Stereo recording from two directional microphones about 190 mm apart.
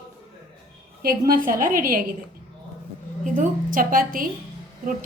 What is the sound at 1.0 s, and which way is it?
Speech, 50° right (ahead or behind).